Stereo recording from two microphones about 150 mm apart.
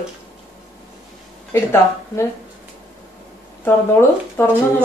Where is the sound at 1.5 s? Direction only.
20° left (ahead or behind).